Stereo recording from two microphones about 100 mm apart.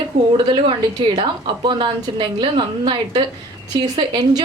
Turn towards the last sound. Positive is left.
turn(degrees=-45)  # may be behind; listen again after turning